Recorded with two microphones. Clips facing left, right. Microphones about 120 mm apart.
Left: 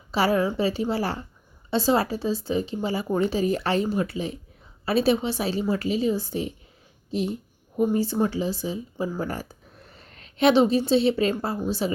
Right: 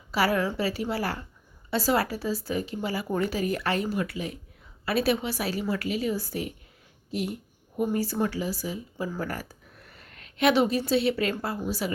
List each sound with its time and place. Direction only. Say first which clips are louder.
0.1 s speech: left 3 dB; 25° left (ahead or behind)